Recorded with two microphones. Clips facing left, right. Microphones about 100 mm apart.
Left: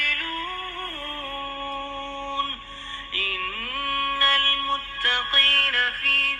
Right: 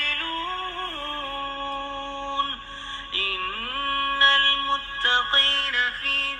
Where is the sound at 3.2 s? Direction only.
25° right (ahead or behind).